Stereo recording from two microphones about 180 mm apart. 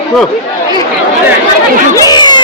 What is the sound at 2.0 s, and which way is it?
Speech, 25° left (ahead or behind).